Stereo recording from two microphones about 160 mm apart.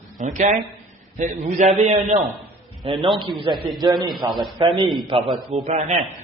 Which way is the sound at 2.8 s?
30° right (ahead or behind).